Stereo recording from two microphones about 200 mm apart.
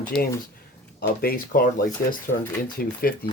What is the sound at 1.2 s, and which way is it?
Speech, 45° left (ahead or behind).